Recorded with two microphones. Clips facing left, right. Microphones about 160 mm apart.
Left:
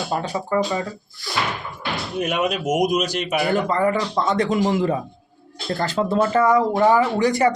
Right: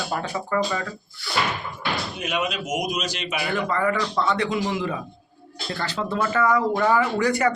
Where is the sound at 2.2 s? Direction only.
55° left (ahead or behind).